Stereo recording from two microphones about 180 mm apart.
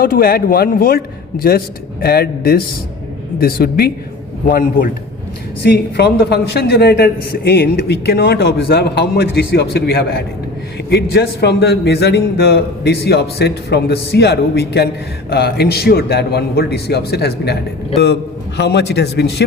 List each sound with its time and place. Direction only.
0.0 s a man's voice: 55° left (ahead or behind)